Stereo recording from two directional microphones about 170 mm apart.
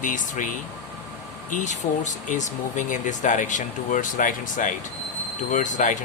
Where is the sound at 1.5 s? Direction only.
45° left (ahead or behind).